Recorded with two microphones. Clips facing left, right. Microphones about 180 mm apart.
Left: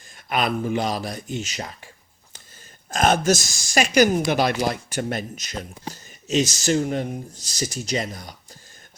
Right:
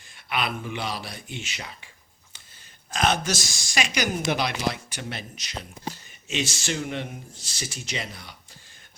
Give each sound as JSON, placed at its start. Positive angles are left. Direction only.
{"t": 0.3, "sound": "speech", "side_deg": 45}
{"t": 2.9, "sound": "speech", "side_deg": 45}